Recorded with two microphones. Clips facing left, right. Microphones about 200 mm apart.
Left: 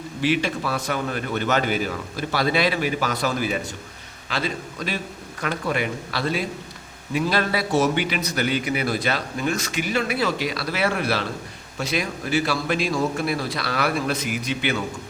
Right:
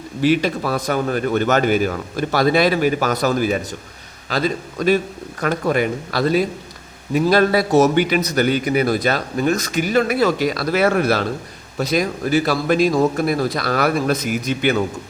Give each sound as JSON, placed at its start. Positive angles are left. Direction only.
{"t": 0.2, "sound": "a man's voice", "side_deg": -40}